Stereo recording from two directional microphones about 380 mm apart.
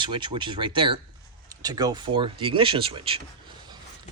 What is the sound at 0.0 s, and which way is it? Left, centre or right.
Speech, centre.